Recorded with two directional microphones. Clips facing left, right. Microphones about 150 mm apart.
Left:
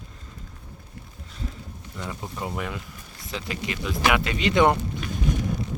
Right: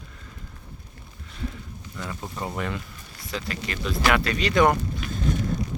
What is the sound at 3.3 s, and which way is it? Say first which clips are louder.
Speech: even; 15° left (ahead or behind).